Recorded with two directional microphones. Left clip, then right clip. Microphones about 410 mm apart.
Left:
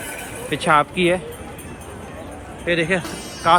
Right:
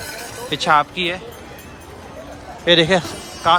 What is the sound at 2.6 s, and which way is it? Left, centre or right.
Speech, centre.